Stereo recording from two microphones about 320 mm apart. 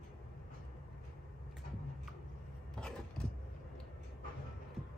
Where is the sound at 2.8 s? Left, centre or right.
Centre.